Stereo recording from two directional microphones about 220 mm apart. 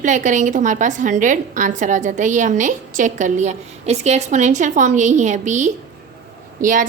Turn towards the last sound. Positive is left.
turn(degrees=-35)  # may be behind; listen again after turning